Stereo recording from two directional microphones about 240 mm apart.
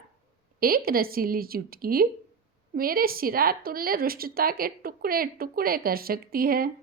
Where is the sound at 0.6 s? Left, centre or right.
Right.